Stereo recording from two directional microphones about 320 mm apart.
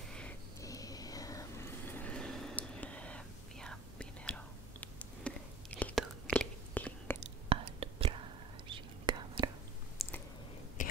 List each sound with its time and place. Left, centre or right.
0.1 s vehicle: centre
7.4 s whispering: centre
10.0 s a sound: centre
10.8 s whispering: left